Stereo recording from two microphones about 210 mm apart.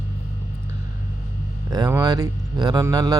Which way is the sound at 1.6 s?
20° right (ahead or behind).